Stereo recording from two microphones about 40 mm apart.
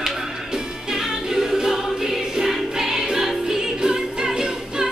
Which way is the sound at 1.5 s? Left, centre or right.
Centre.